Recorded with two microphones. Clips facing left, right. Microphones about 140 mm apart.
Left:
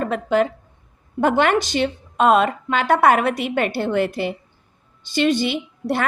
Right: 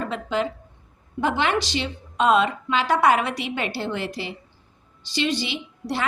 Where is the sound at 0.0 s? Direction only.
50° left (ahead or behind).